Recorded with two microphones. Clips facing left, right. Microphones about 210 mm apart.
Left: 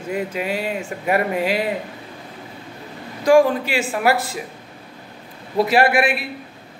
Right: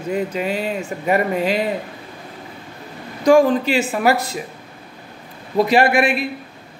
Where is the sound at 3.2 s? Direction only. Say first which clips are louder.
Right 1 dB; 10° left (ahead or behind).